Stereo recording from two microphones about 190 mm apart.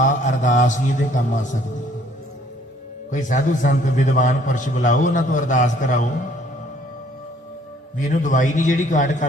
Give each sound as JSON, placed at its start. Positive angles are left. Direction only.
{"t": 0.0, "sound": "a man's voice", "side_deg": 40}
{"t": 3.1, "sound": "a man's voice", "side_deg": 40}
{"t": 7.9, "sound": "a man's voice", "side_deg": 40}